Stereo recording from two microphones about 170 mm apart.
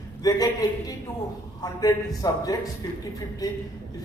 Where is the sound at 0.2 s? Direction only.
20° left (ahead or behind).